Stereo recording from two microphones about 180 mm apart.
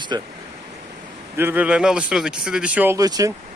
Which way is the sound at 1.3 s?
10° right (ahead or behind).